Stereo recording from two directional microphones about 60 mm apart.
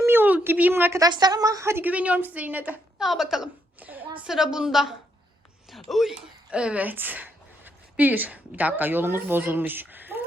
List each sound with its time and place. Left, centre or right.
0.0 s a sound: right
0.4 s speech: right
0.7 s a woman's voice: right
0.9 s a woman's voice: right
1.9 s a woman's voice: right
3.0 s a woman's voice: centre
3.8 s a sound: right
4.3 s a woman's voice: centre
6.5 s a woman's voice: centre
6.8 s speech: right